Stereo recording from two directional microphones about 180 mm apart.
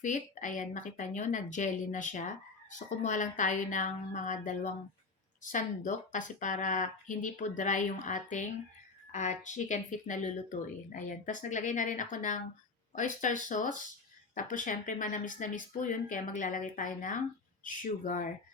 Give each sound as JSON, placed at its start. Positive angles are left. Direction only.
{"t": 0.0, "sound": "a woman's voice", "side_deg": 45}